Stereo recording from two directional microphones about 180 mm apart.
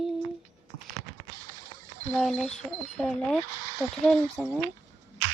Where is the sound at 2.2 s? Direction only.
Centre (ahead or behind).